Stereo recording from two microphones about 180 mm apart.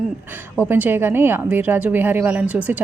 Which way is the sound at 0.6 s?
10° right (ahead or behind).